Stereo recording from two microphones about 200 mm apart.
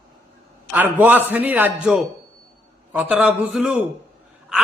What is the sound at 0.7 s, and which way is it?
A man's voice, 10° right (ahead or behind).